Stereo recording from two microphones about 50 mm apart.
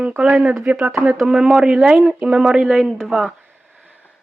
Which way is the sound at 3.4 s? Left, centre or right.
Right.